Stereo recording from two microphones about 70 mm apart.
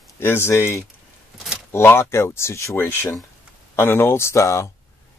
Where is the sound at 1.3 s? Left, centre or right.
Centre.